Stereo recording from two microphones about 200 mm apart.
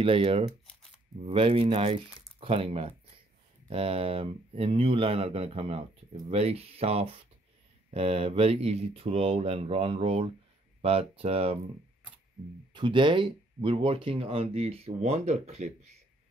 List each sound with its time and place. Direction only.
0.0 s speech: 25° right (ahead or behind)
12.7 s speech: 25° right (ahead or behind)